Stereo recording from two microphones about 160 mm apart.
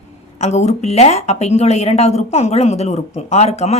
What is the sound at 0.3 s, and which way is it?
Speech, 45° left (ahead or behind).